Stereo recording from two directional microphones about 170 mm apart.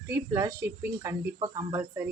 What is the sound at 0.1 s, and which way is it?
A man's voice, 20° right (ahead or behind).